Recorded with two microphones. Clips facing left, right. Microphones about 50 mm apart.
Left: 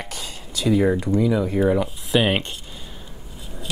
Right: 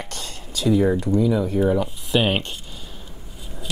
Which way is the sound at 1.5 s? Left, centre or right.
Centre.